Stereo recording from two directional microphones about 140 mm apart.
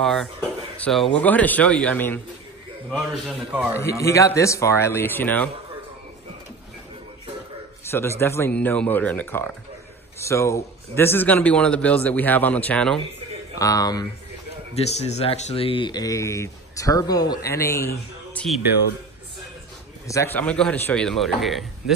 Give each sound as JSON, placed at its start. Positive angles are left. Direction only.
{"t": 0.0, "sound": "a man's voice", "side_deg": 0}
{"t": 3.3, "sound": "a man's voice", "side_deg": -10}
{"t": 4.0, "sound": "speech", "side_deg": 20}
{"t": 7.9, "sound": "a man's voice", "side_deg": 15}
{"t": 13.6, "sound": "speech", "side_deg": 25}
{"t": 14.8, "sound": "speech", "side_deg": 50}
{"t": 18.3, "sound": "music", "side_deg": 5}
{"t": 20.3, "sound": "a man's voice", "side_deg": 10}